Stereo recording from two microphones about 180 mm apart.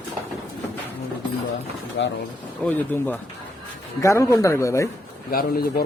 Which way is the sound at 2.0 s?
70° left (ahead or behind).